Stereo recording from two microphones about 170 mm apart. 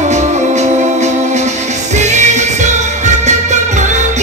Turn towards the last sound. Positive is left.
turn(degrees=-45)  # may be behind; listen again after turning